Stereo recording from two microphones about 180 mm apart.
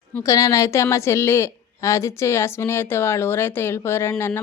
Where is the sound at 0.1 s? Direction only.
15° left (ahead or behind).